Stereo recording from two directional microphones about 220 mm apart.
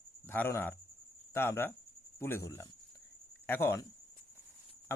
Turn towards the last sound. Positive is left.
turn(degrees=10)  # may be behind; listen again after turning